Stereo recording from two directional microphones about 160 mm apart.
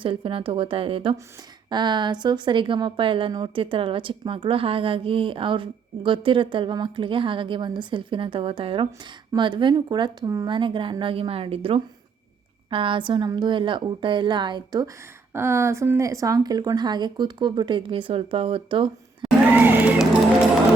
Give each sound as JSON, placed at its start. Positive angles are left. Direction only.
{"t": 0.0, "sound": "a woman's voice", "side_deg": -35}
{"t": 15.3, "sound": "speech", "side_deg": -15}
{"t": 19.5, "sound": "music", "side_deg": -10}